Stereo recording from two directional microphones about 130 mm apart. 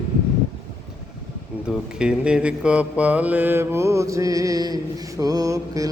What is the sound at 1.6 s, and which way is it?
Mantra, 5° right (ahead or behind).